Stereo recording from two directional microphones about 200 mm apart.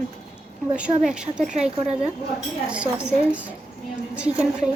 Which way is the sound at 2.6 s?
5° right (ahead or behind).